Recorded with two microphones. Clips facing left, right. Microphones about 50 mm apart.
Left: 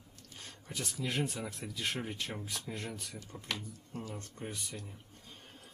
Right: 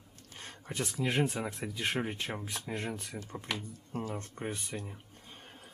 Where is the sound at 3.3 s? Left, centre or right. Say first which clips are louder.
Right 6 dB; right.